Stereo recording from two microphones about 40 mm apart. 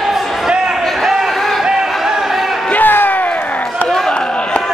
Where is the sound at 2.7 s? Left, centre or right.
Left.